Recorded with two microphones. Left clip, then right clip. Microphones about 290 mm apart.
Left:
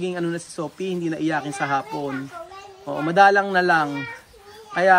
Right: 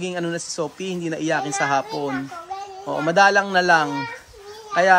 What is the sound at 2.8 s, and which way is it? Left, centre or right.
A man's voice, centre.